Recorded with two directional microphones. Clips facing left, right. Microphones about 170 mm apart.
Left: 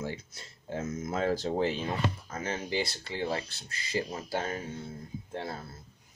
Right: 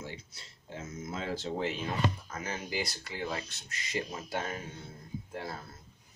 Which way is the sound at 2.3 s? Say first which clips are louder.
Left 4 dB; 30° left (ahead or behind).